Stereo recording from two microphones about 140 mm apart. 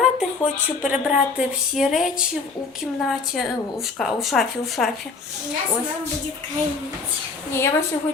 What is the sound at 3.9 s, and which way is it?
Speech, centre (ahead or behind).